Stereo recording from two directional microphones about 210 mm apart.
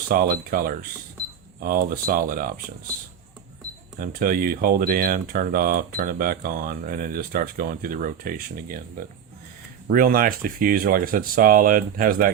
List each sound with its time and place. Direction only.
0.1 s speech: 45° right (ahead or behind)
3.9 s speech: 40° right (ahead or behind)
9.8 s speech: 45° right (ahead or behind)